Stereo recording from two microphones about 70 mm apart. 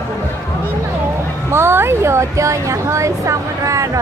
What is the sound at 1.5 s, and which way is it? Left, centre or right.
Speech, right.